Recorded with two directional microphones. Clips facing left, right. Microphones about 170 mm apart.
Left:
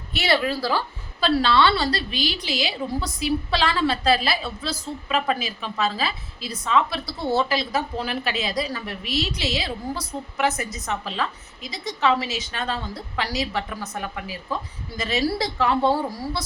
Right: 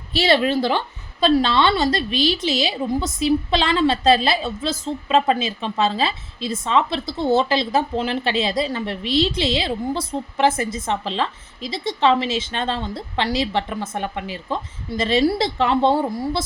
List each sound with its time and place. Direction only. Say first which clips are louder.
0.1 s a woman's voice: right 5 dB; 25° right (ahead or behind)